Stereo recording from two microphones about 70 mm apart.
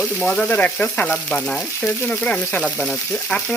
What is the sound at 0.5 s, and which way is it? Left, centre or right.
Speech, left.